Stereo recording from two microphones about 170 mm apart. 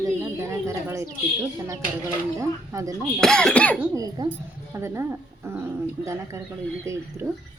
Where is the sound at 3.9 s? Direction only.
20° right (ahead or behind).